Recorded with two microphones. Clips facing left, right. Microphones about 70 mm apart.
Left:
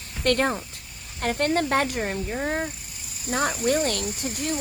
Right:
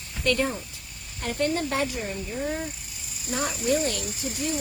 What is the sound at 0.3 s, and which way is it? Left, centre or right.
Speech, left.